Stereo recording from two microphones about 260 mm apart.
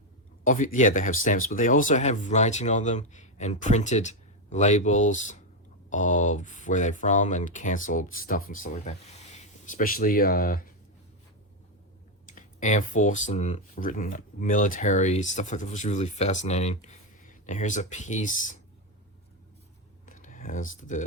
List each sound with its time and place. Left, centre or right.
0.4 s speech: left
12.2 s speech: left
20.1 s computer keyboard: left